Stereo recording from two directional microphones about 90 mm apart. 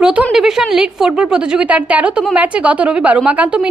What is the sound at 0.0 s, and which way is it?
A woman's voice, 5° right (ahead or behind).